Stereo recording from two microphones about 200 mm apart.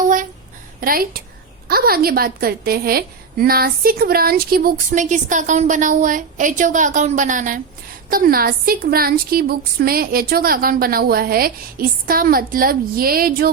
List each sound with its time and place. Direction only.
0.8 s a woman's voice: 45° right (ahead or behind)